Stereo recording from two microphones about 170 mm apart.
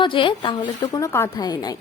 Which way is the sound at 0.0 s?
30° left (ahead or behind).